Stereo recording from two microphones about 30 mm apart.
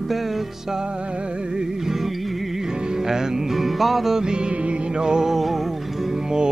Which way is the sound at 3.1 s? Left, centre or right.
Centre.